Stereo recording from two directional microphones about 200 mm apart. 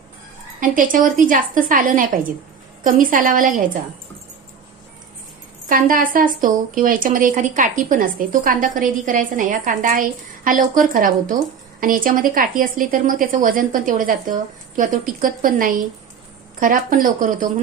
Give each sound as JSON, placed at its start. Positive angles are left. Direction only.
{"t": 0.6, "sound": "speech", "side_deg": -45}
{"t": 5.6, "sound": "speech", "side_deg": -45}